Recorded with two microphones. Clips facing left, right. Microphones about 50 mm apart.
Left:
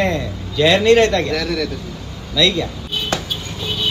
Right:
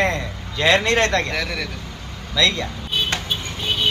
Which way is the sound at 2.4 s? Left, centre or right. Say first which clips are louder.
Left 3 dB; right.